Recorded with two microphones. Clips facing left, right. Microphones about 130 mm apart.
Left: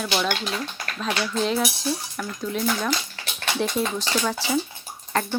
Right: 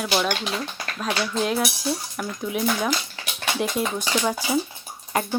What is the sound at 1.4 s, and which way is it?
Speech, 5° right (ahead or behind).